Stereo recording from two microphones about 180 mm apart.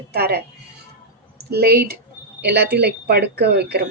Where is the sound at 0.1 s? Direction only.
60° right (ahead or behind).